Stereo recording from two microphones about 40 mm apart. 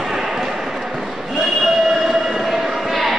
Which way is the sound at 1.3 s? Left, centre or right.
Centre.